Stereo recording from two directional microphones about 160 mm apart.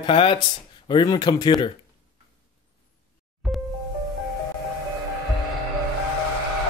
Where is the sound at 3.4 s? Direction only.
Centre (ahead or behind).